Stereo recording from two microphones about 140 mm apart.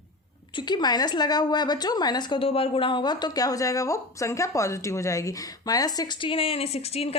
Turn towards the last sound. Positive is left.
turn(degrees=45)  # may be behind; listen again after turning